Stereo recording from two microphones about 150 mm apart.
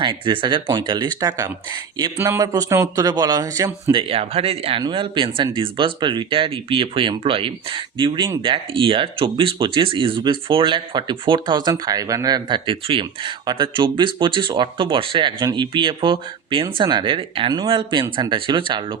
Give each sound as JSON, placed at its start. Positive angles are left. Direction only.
{"t": 0.0, "sound": "a man's voice", "side_deg": -35}
{"t": 3.9, "sound": "speech", "side_deg": -40}